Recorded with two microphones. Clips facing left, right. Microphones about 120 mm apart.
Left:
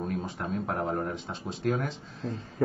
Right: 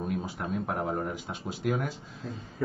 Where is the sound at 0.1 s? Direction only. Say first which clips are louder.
Even; 5° right (ahead or behind).